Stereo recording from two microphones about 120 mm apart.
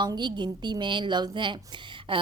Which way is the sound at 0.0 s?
35° right (ahead or behind).